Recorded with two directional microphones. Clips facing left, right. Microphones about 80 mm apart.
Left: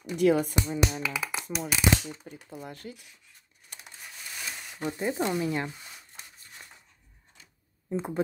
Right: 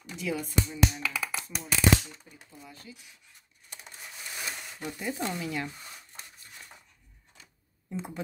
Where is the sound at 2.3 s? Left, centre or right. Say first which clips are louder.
Left 8 dB; left.